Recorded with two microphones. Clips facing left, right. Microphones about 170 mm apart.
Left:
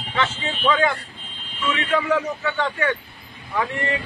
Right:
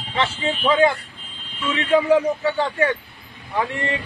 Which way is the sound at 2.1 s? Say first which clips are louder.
Right 5 dB; 35° right (ahead or behind).